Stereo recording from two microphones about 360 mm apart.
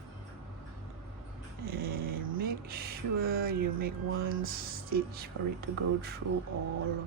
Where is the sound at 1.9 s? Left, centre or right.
Right.